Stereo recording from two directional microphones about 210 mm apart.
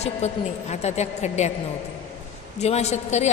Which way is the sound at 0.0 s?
30° left (ahead or behind).